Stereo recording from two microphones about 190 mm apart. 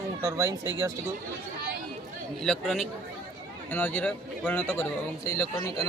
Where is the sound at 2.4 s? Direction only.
Centre (ahead or behind).